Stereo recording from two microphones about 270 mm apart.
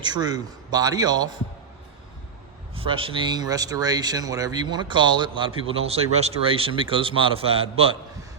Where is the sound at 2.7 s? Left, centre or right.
Centre.